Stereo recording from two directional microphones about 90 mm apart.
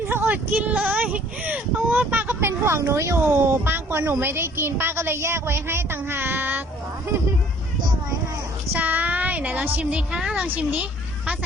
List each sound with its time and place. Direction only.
0.1 s speech: 20° right (ahead or behind)
8.7 s a woman's voice: 20° right (ahead or behind)